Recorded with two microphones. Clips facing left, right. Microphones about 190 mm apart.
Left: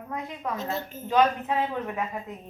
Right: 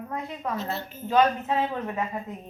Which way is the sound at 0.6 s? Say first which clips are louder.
Even; 45° left (ahead or behind).